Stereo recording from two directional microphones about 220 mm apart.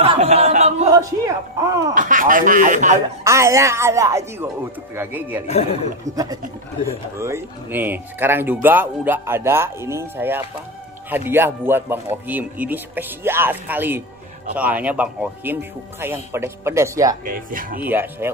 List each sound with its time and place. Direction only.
0.0 s a sound: 25° right (ahead or behind)
0.9 s speech: 15° right (ahead or behind)
2.0 s speech: 35° right (ahead or behind)
3.3 s speech: 15° right (ahead or behind)
5.5 s speech: 30° left (ahead or behind)
6.1 s speech: 15° right (ahead or behind)
17.2 s speech: 40° right (ahead or behind)
17.8 s speech: 10° right (ahead or behind)